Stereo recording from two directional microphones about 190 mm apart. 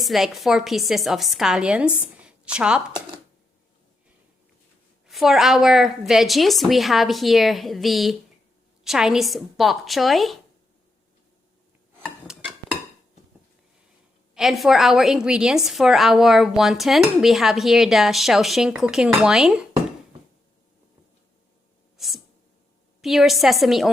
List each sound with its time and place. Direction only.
0.0 s a woman's voice: centre (ahead or behind)
5.0 s a woman's voice: centre (ahead or behind)
14.3 s a woman's voice: centre (ahead or behind)
21.9 s a sound: centre (ahead or behind)
23.0 s a woman's voice: centre (ahead or behind)